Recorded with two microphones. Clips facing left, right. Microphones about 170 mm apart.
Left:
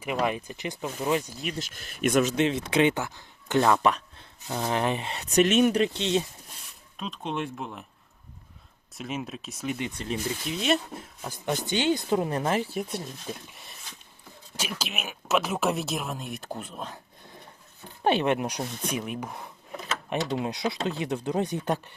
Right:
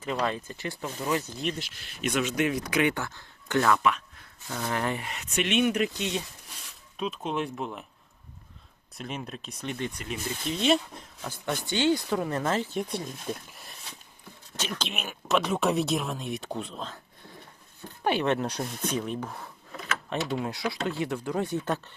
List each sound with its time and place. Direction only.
0.0 s speech: 15° left (ahead or behind)
1.5 s speech: 45° left (ahead or behind)
2.3 s speech: 25° left (ahead or behind)
5.1 s speech: 35° left (ahead or behind)
7.0 s speech: 5° right (ahead or behind)
9.0 s speech: centre (ahead or behind)
10.0 s speech: 30° left (ahead or behind)
10.6 s speech: centre (ahead or behind)
11.2 s speech: 20° left (ahead or behind)
18.0 s speech: 20° left (ahead or behind)